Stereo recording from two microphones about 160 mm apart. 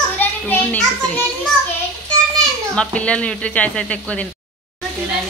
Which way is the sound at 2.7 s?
5° left (ahead or behind).